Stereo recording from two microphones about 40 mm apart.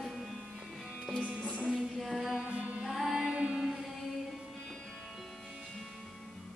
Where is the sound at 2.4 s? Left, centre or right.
Right.